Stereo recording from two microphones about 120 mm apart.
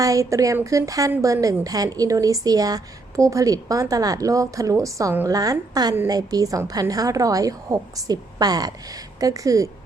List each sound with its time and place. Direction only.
0.0 s a woman's voice: 30° right (ahead or behind)